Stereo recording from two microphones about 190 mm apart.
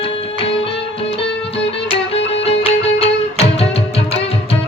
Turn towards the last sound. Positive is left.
turn(degrees=30)  # may be behind; listen again after turning